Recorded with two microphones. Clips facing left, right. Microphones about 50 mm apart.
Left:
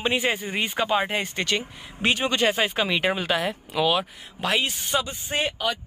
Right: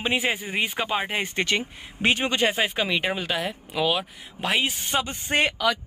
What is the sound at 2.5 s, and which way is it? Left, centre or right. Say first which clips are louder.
Speech: left 1 dB; centre.